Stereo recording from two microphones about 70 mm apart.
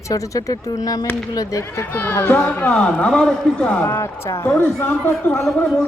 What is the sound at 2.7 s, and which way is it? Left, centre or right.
A man's voice, centre.